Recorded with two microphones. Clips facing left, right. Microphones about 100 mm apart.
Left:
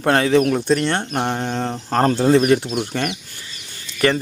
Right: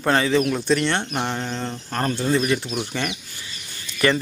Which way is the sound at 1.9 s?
70° left (ahead or behind).